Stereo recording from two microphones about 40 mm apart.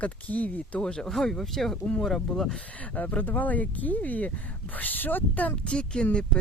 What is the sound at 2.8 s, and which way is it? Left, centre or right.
Speech, left.